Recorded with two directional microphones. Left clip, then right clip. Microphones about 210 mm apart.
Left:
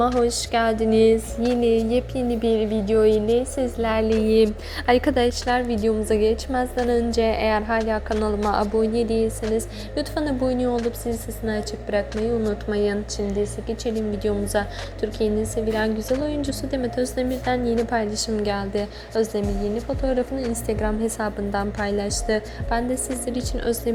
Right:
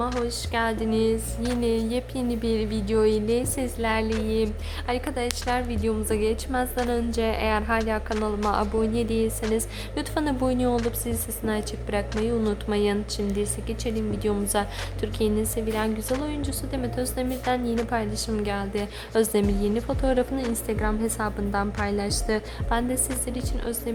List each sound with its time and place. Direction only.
0.3 s speech: 15° left (ahead or behind)
2.3 s a woman's voice: centre (ahead or behind)
4.2 s a sound: 20° left (ahead or behind)
4.9 s a woman's voice: 25° left (ahead or behind); by 18.9 s 5° left (ahead or behind)
19.1 s a woman's voice: 15° right (ahead or behind)
23.2 s speech: 10° left (ahead or behind)